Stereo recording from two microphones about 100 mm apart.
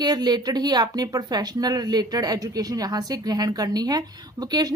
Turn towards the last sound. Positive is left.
turn(degrees=-40)  # may be behind; listen again after turning